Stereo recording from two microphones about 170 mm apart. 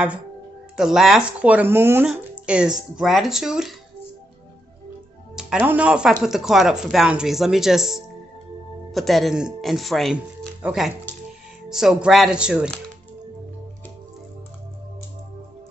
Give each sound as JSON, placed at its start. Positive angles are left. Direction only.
{"t": 0.7, "sound": "speech", "side_deg": -5}
{"t": 5.3, "sound": "speech", "side_deg": -5}